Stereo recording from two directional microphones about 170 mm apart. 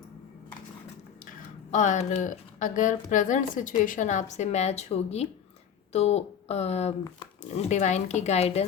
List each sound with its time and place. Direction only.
1.7 s a woman's voice: 45° left (ahead or behind)